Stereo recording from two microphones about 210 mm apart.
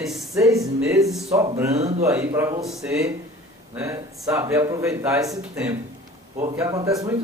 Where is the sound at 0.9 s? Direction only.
Centre (ahead or behind).